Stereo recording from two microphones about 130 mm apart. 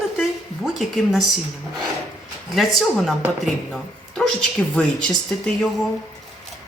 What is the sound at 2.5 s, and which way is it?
A woman's voice, centre (ahead or behind).